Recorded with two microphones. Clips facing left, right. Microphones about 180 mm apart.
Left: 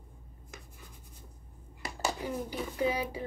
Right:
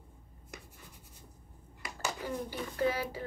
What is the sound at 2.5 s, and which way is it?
Speech, 10° left (ahead or behind).